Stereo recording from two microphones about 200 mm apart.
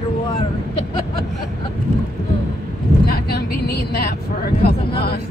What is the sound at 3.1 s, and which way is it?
Speech, 50° left (ahead or behind).